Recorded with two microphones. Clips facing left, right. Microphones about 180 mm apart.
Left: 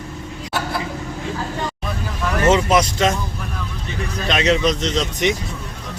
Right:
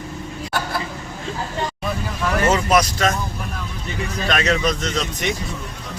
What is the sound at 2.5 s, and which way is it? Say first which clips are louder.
Vehicle: left 4 dB; 20° left (ahead or behind).